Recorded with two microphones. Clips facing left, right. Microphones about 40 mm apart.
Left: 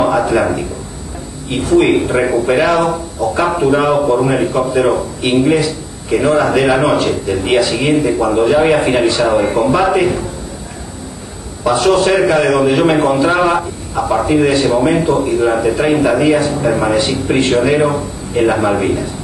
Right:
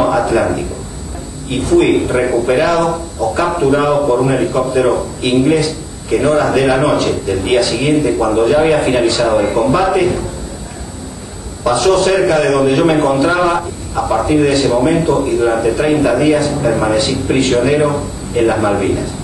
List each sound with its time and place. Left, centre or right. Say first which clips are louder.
0.0 s a sound: even; centre
1.5 s a man's voice: even; left
11.6 s a man's voice: even; left